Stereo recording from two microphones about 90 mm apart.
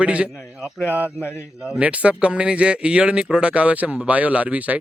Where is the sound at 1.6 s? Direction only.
10° right (ahead or behind).